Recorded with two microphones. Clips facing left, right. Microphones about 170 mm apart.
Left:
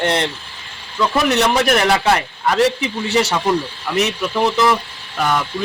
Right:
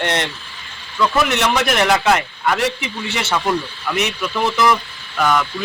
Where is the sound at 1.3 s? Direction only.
35° left (ahead or behind).